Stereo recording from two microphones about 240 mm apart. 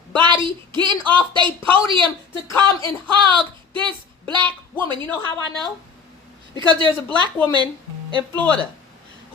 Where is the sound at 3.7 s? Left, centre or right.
Centre.